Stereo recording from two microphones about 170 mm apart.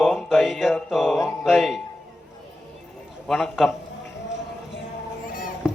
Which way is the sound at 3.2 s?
Centre (ahead or behind).